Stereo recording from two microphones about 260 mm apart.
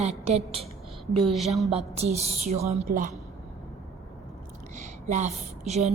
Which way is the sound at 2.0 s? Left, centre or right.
Right.